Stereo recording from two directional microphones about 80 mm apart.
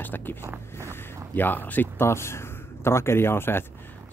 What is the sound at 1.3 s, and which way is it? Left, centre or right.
Speech, left.